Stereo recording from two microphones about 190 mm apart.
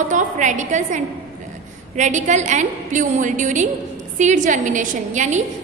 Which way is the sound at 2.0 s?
40° right (ahead or behind).